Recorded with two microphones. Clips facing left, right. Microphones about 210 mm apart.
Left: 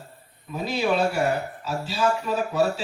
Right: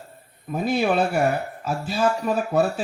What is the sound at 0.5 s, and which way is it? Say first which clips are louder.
Speech: right 3 dB; 50° right (ahead or behind).